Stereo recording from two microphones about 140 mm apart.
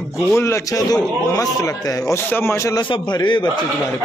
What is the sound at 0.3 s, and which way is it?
A man's voice, 20° left (ahead or behind).